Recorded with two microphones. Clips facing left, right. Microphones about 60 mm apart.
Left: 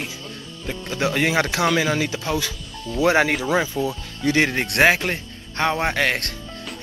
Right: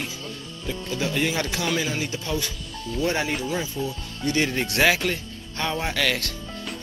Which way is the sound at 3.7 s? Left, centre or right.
Left.